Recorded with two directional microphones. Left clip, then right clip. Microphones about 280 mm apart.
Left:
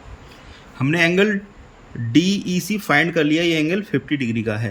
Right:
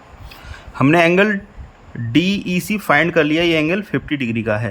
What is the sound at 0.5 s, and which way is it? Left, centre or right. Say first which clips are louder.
A man's voice: right 8 dB; centre.